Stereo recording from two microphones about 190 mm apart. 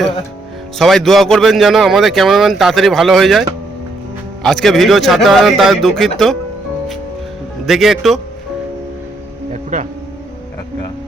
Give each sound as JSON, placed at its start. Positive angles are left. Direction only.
{"t": 0.8, "sound": "speech", "side_deg": 0}
{"t": 4.4, "sound": "speech", "side_deg": 0}
{"t": 7.6, "sound": "speech", "side_deg": 0}
{"t": 9.5, "sound": "music", "side_deg": -40}